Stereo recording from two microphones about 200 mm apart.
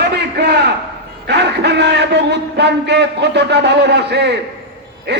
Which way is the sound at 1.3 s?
55° right (ahead or behind).